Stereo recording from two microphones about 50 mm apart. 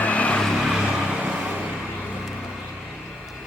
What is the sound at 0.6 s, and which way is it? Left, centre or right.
Vehicle, centre.